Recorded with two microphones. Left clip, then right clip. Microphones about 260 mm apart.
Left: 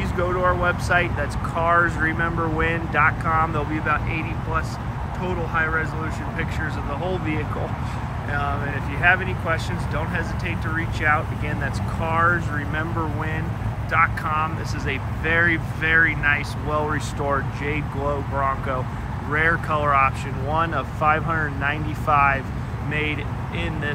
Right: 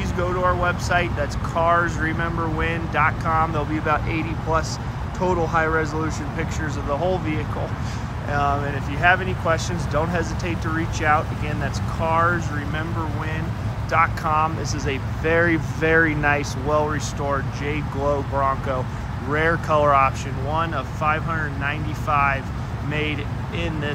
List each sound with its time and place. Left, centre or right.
0.0 s speech: centre
7.1 s speech: centre
13.9 s speech: centre
19.3 s speech: centre